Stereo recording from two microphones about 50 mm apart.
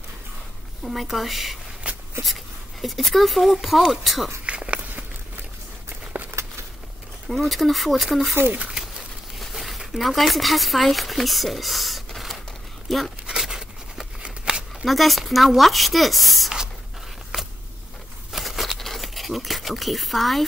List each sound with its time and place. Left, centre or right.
0.8 s speech: centre
1.8 s a sound: right
2.2 s speech: centre
4.5 s walk: right
7.2 s speech: centre
8.5 s bird: centre
9.4 s speech: centre
13.3 s a sound: centre
14.9 s speech: centre
18.3 s a sound: centre